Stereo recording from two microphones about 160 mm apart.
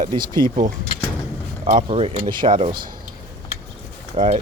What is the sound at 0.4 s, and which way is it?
Speech, 55° right (ahead or behind).